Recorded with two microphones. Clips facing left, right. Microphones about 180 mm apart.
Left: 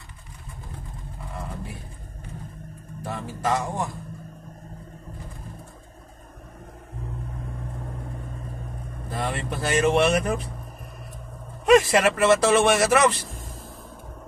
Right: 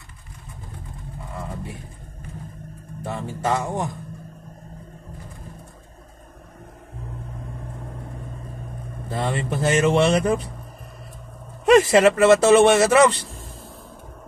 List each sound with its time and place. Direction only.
3.0 s speech: 25° right (ahead or behind)
9.1 s speech: 25° right (ahead or behind)
11.9 s speech: 25° right (ahead or behind)